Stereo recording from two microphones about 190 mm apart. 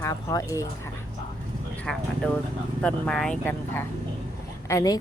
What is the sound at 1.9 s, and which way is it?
A woman's voice, 5° left (ahead or behind).